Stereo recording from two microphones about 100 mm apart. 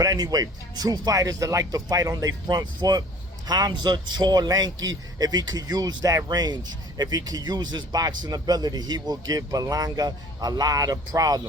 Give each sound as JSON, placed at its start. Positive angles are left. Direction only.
{"t": 0.0, "sound": "speech", "side_deg": -40}